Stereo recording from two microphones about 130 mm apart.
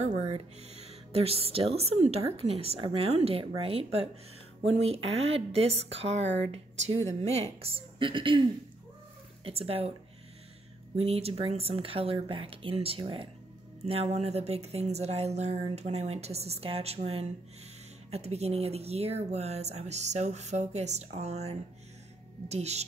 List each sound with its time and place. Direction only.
0.0 s a woman's voice: 60° right (ahead or behind)
11.0 s speech: 50° right (ahead or behind)